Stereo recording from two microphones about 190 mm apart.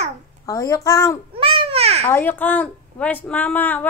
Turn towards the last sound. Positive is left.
turn(degrees=10)  # may be behind; listen again after turning